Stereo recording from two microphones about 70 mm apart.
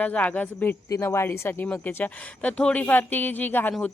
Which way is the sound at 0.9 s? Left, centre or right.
Left.